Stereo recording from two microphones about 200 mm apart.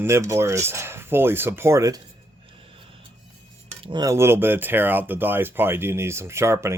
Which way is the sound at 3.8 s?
20° right (ahead or behind).